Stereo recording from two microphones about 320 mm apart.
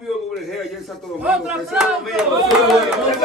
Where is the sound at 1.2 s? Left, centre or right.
Centre.